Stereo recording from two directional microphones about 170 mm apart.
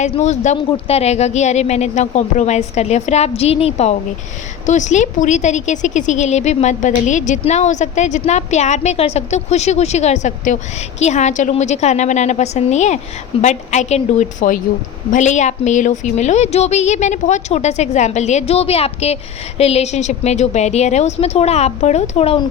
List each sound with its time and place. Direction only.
0.0 s a woman's voice: 45° left (ahead or behind)